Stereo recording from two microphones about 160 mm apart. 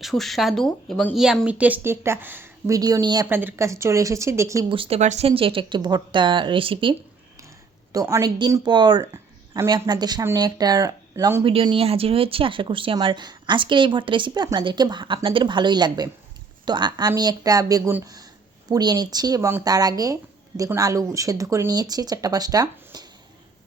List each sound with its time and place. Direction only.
0.0 s speech: centre (ahead or behind); by 3.2 s 25° right (ahead or behind)
3.2 s speech: 15° right (ahead or behind)
4.7 s speech: 35° right (ahead or behind)
7.9 s speech: 20° right (ahead or behind)
11.4 s speech: 35° right (ahead or behind)